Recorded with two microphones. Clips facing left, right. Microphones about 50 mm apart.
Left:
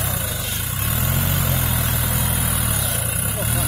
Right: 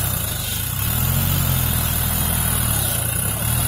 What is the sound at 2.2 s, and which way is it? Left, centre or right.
Vehicle, centre.